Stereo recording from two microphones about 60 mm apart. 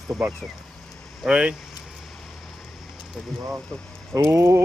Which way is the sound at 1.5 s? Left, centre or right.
Centre.